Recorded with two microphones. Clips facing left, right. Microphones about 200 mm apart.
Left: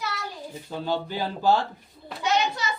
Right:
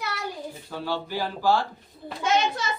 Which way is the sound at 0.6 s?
20° left (ahead or behind).